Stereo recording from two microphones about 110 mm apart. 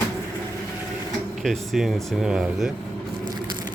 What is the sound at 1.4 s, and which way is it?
Speech, centre (ahead or behind).